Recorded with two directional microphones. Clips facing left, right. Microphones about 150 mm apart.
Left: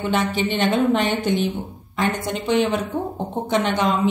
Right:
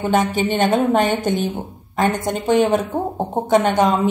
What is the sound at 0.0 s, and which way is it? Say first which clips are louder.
A woman's voice: right 4 dB; 45° right (ahead or behind).